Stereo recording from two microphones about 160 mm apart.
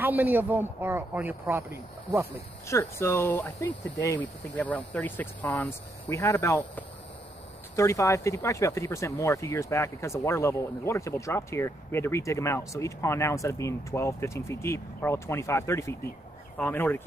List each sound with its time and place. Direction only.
0.0 s a man's voice: 10° right (ahead or behind)
2.7 s speech: 15° left (ahead or behind)